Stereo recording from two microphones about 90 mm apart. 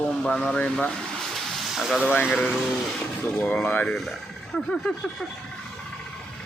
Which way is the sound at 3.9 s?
Centre (ahead or behind).